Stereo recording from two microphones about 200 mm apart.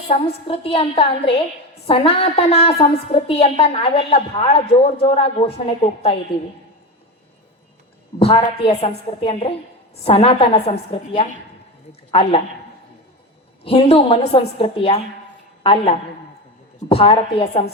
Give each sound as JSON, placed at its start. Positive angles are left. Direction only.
{"t": 0.1, "sound": "a woman's voice", "side_deg": 30}
{"t": 8.2, "sound": "a woman's voice", "side_deg": 30}
{"t": 13.7, "sound": "a woman's voice", "side_deg": 30}